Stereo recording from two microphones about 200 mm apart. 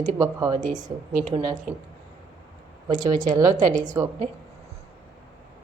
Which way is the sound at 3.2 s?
40° right (ahead or behind).